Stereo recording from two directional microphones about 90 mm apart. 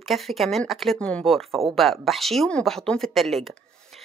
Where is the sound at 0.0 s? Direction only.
Centre (ahead or behind).